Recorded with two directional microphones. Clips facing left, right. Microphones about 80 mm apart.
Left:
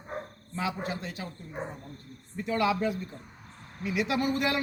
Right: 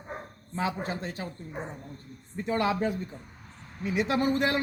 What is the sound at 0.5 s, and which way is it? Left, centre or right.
Speech, right.